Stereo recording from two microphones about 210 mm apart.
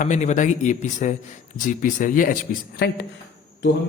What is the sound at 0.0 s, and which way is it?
A man's voice, 35° left (ahead or behind).